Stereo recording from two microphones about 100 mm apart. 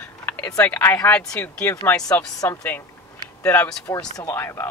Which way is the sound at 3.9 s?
40° left (ahead or behind).